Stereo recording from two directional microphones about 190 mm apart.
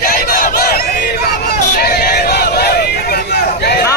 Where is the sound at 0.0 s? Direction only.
50° left (ahead or behind).